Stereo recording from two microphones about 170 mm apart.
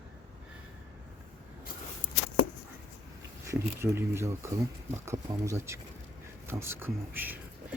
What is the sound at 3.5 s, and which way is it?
Speech, 15° right (ahead or behind).